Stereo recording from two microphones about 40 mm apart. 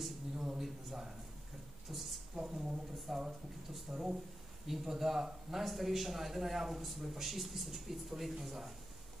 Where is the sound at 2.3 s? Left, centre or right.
Centre.